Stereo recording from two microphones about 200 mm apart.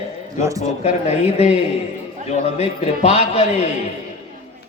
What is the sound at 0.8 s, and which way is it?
A man's voice, 35° left (ahead or behind).